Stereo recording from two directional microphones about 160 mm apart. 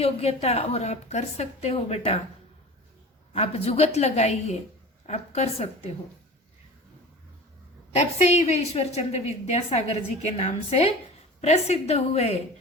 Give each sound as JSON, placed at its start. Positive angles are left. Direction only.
{"t": 0.0, "sound": "a woman's voice", "side_deg": 40}
{"t": 3.3, "sound": "a woman's voice", "side_deg": 40}
{"t": 7.9, "sound": "a woman's voice", "side_deg": 45}